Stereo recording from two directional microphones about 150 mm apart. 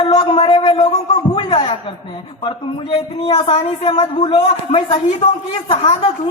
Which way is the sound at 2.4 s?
35° left (ahead or behind).